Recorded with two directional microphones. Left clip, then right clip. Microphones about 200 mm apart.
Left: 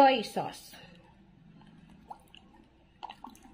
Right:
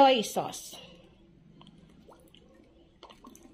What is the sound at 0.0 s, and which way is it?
Speech, 25° right (ahead or behind).